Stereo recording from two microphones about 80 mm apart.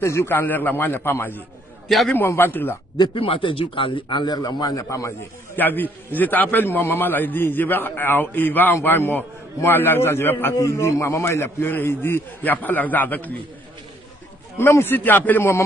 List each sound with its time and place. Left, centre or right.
0.0 s a man's voice: left
3.0 s a man's voice: left
5.6 s a man's voice: left
14.6 s a man's voice: left